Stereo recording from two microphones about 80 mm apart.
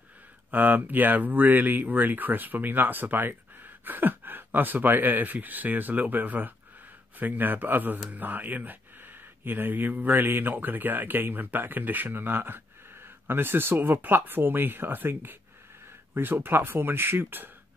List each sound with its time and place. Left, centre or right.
0.5 s speech: right